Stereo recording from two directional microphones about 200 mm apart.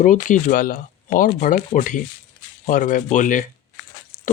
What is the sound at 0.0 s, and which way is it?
Speech, 40° left (ahead or behind).